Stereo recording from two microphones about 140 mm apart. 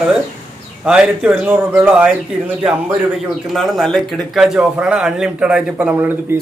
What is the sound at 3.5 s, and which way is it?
A man's voice, centre (ahead or behind).